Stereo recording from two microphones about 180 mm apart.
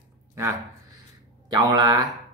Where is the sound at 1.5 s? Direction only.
25° right (ahead or behind).